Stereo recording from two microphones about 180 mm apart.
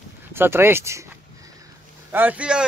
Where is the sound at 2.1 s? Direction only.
10° right (ahead or behind).